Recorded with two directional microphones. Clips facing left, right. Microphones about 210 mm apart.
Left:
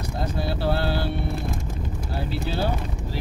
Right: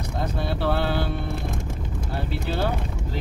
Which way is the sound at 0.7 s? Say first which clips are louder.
Right 1 dB; 55° right (ahead or behind).